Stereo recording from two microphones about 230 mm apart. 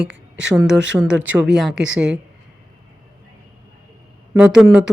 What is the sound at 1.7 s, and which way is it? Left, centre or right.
Speech, right.